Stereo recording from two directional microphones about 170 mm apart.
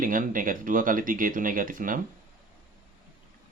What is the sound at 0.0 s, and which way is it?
Speech, 55° right (ahead or behind).